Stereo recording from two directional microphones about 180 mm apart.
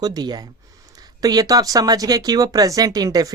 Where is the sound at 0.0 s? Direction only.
20° right (ahead or behind).